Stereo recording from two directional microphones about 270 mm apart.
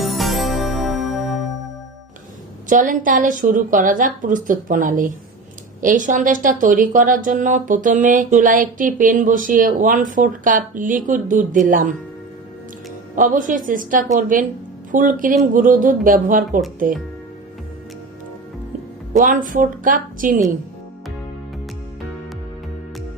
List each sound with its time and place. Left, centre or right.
0.0 s music: centre
2.6 s a woman's voice: right
13.1 s a woman's voice: right
19.1 s a woman's voice: right